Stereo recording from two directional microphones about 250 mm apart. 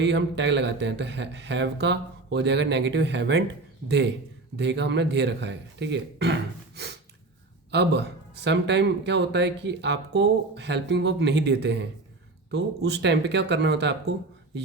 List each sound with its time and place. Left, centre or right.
0.0 s speech: right